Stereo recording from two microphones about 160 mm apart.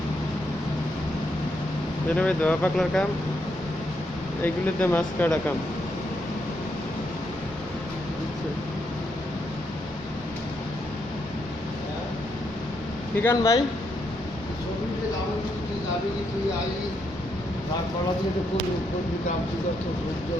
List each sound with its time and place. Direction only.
2.1 s speech: 10° left (ahead or behind)
4.4 s speech: 10° left (ahead or behind)
13.2 s speech: 20° left (ahead or behind)